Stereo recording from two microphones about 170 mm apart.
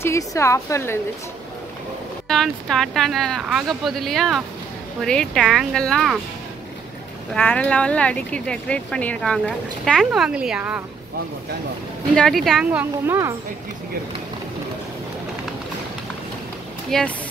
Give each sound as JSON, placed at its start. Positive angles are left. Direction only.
{"t": 0.0, "sound": "a woman's voice", "side_deg": 15}
{"t": 2.2, "sound": "speech", "side_deg": 0}
{"t": 7.3, "sound": "speech", "side_deg": 5}
{"t": 12.2, "sound": "speech", "side_deg": 0}
{"t": 13.0, "sound": "speech", "side_deg": -15}
{"t": 16.9, "sound": "speech", "side_deg": 0}